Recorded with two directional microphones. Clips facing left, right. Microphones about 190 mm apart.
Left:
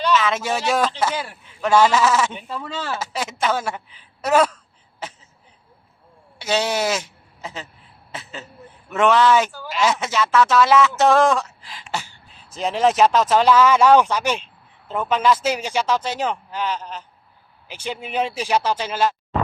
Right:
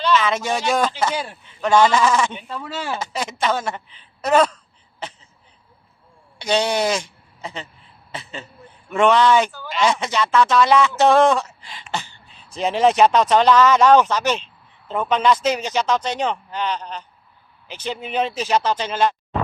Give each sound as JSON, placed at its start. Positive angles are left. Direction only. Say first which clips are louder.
{"t": 0.1, "sound": "speech", "louder": "right 2 dB", "side_deg": 0}
{"t": 1.1, "sound": "a man's voice", "louder": "right 1 dB", "side_deg": -20}
{"t": 1.6, "sound": "speech", "louder": "even", "side_deg": 5}
{"t": 3.0, "sound": "a woman's voice", "louder": "even", "side_deg": 5}
{"t": 6.4, "sound": "speech", "louder": "right 2 dB", "side_deg": 5}